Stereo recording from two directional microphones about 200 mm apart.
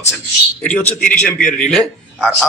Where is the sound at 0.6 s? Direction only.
5° left (ahead or behind).